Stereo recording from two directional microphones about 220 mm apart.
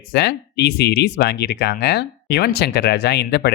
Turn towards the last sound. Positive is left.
turn(degrees=50)  # may be behind; listen again after turning